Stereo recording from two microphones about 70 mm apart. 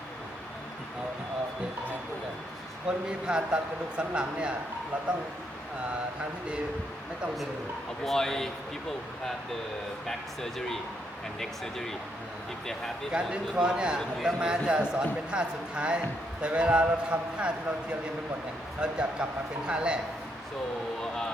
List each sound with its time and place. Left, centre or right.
2.9 s a man's voice: centre
8.0 s speech: centre
10.1 s speech: centre
13.1 s a man's voice: centre
18.8 s a man's voice: centre